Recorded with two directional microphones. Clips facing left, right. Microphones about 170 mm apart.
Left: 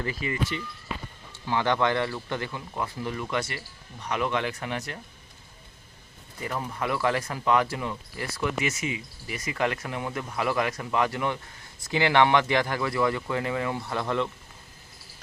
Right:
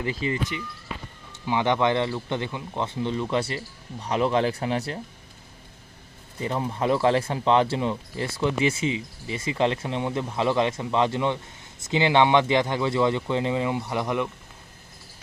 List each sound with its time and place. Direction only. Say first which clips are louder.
0.0 s speech: right 4 dB; 25° right (ahead or behind)
1.5 s speech: right 2 dB; 20° right (ahead or behind)
6.4 s speech: right 5 dB; 25° right (ahead or behind)